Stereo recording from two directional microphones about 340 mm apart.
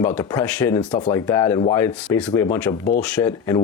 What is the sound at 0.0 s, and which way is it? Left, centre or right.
Speech, centre.